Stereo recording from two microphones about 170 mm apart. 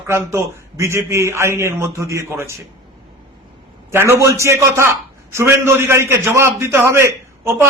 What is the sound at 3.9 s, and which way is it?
A man's voice, 15° right (ahead or behind).